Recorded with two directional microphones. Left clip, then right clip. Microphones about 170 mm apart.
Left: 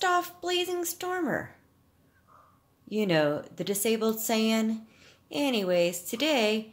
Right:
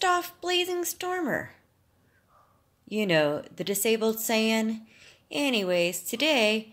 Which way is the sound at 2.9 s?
Centre (ahead or behind).